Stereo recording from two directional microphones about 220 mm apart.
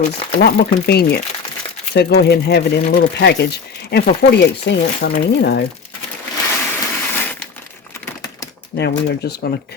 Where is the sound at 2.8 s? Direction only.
40° left (ahead or behind).